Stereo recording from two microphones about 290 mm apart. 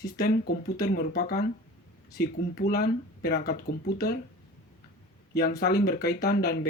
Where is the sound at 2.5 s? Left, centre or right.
Left.